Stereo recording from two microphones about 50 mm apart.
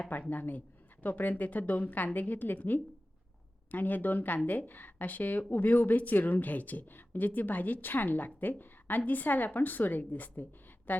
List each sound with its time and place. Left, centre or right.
0.1 s a woman's voice: left